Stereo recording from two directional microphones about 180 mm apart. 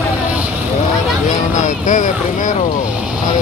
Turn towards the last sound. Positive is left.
turn(degrees=45)  # may be behind; listen again after turning